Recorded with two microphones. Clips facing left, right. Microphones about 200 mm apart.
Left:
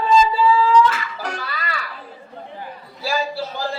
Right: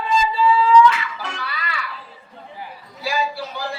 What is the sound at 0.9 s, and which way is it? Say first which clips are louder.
Music: even; 40° left (ahead or behind).